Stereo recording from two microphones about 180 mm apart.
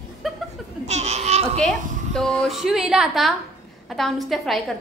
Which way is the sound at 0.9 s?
40° right (ahead or behind).